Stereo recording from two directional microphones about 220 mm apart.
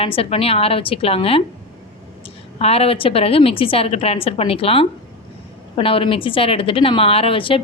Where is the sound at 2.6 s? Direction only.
25° left (ahead or behind).